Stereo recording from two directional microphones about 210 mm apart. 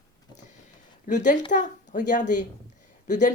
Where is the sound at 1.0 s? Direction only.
35° left (ahead or behind).